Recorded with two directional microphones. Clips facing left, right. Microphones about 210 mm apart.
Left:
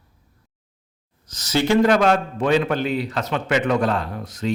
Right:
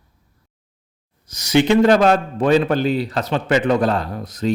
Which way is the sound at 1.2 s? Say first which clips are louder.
Right 5 dB; 10° right (ahead or behind).